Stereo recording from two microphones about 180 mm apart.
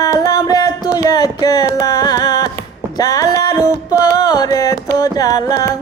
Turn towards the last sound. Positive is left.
turn(degrees=20)  # may be behind; listen again after turning